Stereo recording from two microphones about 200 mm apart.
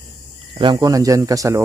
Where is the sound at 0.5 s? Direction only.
25° right (ahead or behind).